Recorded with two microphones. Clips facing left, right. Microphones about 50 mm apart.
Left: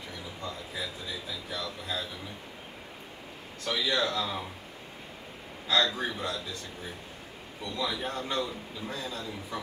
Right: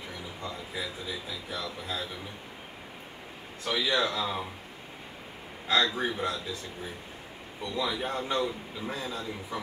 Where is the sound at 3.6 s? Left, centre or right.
Centre.